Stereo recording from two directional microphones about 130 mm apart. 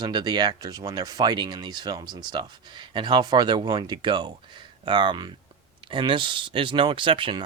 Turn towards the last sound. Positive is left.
turn(degrees=-40)  # may be behind; listen again after turning